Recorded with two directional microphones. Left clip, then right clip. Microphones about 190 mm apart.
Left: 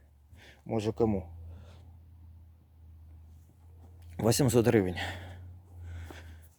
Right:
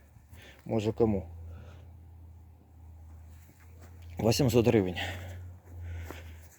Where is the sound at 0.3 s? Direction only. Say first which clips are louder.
Right 1 dB; 5° left (ahead or behind).